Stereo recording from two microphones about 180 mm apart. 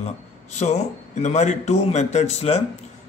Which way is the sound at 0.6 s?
40° left (ahead or behind).